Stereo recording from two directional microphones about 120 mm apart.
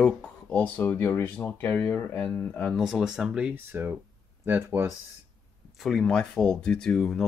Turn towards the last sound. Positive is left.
turn(degrees=5)  # may be behind; listen again after turning